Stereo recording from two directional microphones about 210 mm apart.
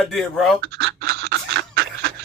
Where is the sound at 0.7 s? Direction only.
50° right (ahead or behind).